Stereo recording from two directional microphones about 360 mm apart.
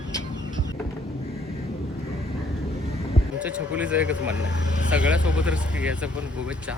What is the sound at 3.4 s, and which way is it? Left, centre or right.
Speech, centre.